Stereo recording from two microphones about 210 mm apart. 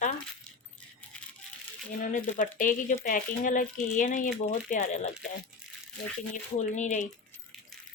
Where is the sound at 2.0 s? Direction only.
40° left (ahead or behind).